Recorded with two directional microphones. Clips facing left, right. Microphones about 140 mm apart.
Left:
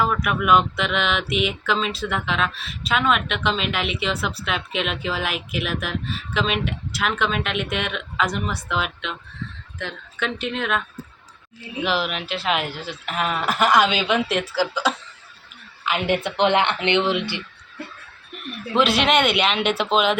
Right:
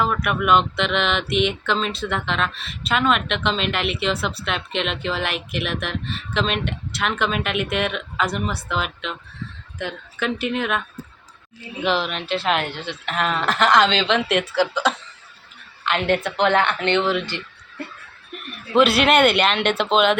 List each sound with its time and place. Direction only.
0.0 s speech: centre (ahead or behind)
10.2 s speech: 5° right (ahead or behind); by 17.4 s 15° left (ahead or behind)
18.7 s speech: centre (ahead or behind)